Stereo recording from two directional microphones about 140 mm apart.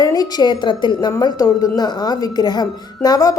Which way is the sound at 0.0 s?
25° left (ahead or behind).